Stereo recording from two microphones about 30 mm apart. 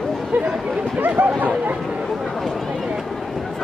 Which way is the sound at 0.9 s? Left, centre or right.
Right.